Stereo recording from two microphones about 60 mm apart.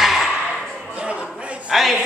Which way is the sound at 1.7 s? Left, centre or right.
Centre.